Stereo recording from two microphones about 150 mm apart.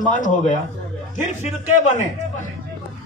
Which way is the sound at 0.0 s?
55° left (ahead or behind).